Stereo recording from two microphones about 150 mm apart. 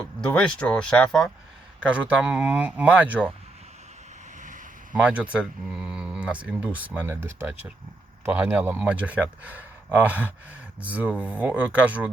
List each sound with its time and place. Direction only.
0.0 s speech: 5° left (ahead or behind)
1.8 s speech: 5° right (ahead or behind)
4.4 s a sound: 60° right (ahead or behind)
4.9 s speech: 10° right (ahead or behind)